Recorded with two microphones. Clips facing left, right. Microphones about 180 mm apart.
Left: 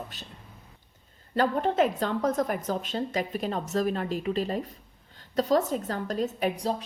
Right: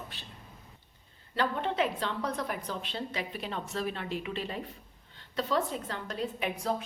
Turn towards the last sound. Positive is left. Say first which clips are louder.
# left 4 dB
turn(degrees=35)  # may be behind; listen again after turning